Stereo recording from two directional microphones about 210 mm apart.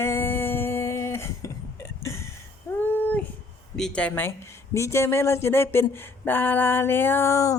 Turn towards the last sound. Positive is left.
turn(degrees=15)  # may be behind; listen again after turning